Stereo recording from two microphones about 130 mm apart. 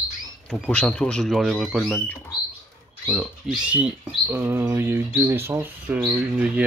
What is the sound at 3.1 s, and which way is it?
Speech, centre (ahead or behind).